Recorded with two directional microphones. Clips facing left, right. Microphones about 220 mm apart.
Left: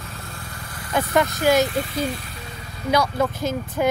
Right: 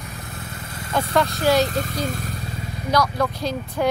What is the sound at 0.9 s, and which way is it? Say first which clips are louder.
Speech: even; 15° left (ahead or behind).